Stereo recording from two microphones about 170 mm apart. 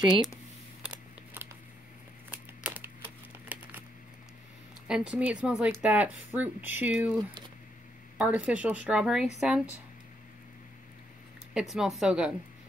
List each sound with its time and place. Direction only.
0.8 s scissors: 10° right (ahead or behind)
2.3 s a sound: 10° right (ahead or behind)
4.8 s speech: 5° right (ahead or behind)
8.2 s a woman's voice: 5° right (ahead or behind)
11.5 s a woman's voice: centre (ahead or behind)